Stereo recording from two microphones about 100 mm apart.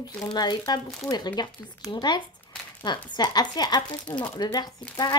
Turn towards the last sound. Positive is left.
turn(degrees=45)  # may be behind; listen again after turning